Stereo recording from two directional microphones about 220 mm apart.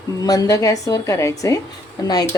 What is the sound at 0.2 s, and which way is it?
Speech, 15° left (ahead or behind).